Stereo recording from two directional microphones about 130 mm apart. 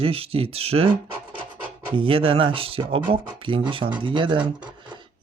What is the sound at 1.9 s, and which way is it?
Speech, 45° right (ahead or behind).